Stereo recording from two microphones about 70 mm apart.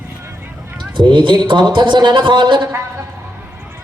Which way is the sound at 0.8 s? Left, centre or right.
Right.